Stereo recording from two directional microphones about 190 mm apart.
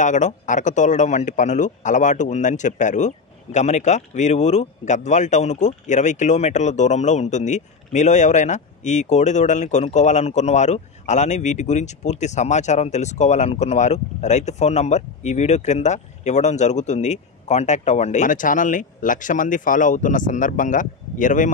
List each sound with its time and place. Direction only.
0.0 s speech: 40° left (ahead or behind)